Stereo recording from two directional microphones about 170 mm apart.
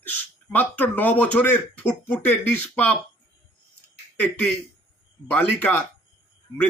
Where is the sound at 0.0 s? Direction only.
10° left (ahead or behind).